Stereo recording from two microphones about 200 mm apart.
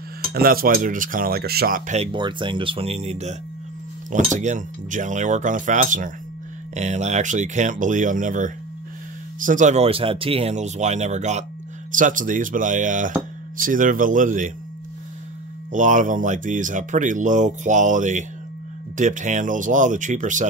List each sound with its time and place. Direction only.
0.3 s cutlery: 50° right (ahead or behind)
1.9 s speech: 30° right (ahead or behind)
15.7 s speech: 40° right (ahead or behind)